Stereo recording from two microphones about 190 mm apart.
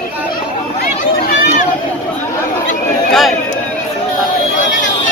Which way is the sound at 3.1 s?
Centre (ahead or behind).